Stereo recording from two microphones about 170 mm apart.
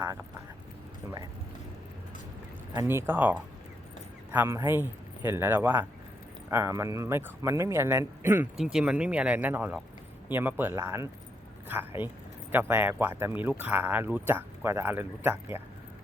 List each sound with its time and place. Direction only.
2.7 s a man's voice: 15° right (ahead or behind)